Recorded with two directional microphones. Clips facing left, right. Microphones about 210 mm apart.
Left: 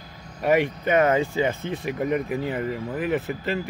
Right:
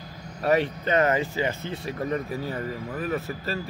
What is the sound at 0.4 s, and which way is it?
Speech, 15° left (ahead or behind).